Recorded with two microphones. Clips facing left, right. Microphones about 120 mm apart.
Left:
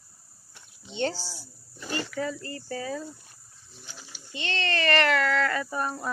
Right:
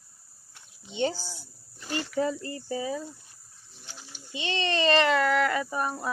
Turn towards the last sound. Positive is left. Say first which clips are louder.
# even
turn(degrees=-5)  # may be behind; listen again after turning